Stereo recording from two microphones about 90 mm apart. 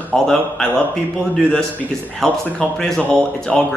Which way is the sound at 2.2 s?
5° left (ahead or behind).